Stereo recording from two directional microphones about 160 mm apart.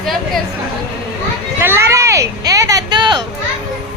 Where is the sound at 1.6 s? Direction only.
15° right (ahead or behind).